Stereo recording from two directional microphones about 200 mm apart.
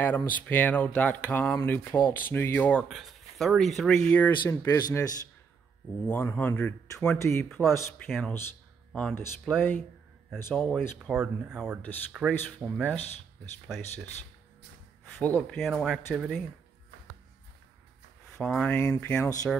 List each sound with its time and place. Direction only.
0.0 s speech: 10° left (ahead or behind)
4.4 s speech: 15° left (ahead or behind)
6.0 s speech: 10° left (ahead or behind)
7.4 s speech: centre (ahead or behind)
7.7 s speech: 15° left (ahead or behind)
11.1 s speech: 5° right (ahead or behind)
15.1 s speech: 10° left (ahead or behind)
18.4 s speech: 5° left (ahead or behind)